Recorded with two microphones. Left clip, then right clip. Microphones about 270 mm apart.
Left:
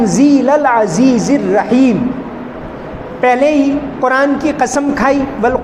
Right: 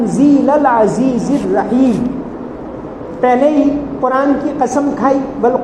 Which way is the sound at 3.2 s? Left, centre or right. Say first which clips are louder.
Even; left.